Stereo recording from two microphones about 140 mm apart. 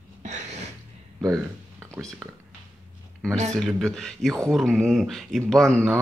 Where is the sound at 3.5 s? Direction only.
5° left (ahead or behind).